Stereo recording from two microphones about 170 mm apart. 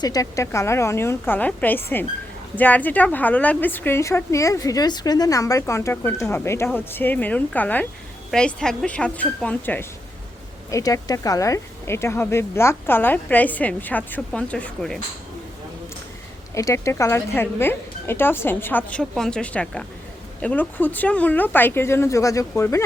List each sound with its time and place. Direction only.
0.0 s speech: 20° left (ahead or behind); by 14.9 s 5° left (ahead or behind)
16.6 s speech: 20° left (ahead or behind)